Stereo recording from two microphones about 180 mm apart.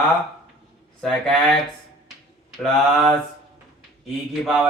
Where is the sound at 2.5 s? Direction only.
5° left (ahead or behind).